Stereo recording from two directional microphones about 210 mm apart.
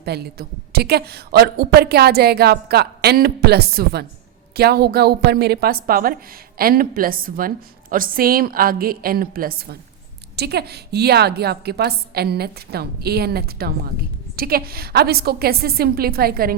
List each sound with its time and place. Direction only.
0.0 s a woman's voice: 50° right (ahead or behind)